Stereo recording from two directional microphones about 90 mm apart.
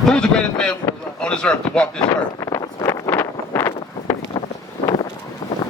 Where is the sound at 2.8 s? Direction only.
25° left (ahead or behind).